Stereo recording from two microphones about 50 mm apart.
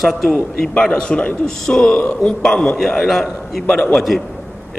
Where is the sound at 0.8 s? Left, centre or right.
Centre.